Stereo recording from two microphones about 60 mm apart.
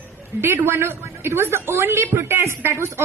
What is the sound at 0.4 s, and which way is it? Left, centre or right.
A woman's voice, right.